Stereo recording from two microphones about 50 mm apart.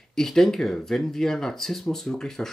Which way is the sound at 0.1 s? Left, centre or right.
Centre.